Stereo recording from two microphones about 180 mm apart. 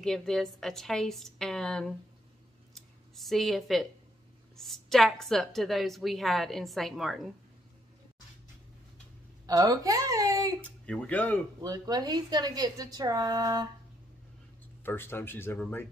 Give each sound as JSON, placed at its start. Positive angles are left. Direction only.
{"t": 0.0, "sound": "a woman's voice", "side_deg": 0}
{"t": 2.7, "sound": "scissors", "side_deg": 0}
{"t": 4.6, "sound": "a woman's voice", "side_deg": 0}
{"t": 9.5, "sound": "a woman's voice", "side_deg": -20}
{"t": 10.9, "sound": "speech", "side_deg": 5}
{"t": 11.6, "sound": "a woman's voice", "side_deg": -20}
{"t": 14.8, "sound": "speech", "side_deg": 10}